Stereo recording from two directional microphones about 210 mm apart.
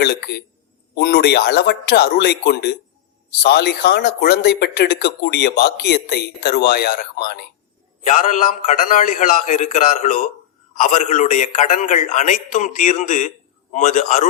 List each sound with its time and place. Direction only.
0.0 s speech: 50° left (ahead or behind)
8.0 s a man's voice: 35° left (ahead or behind)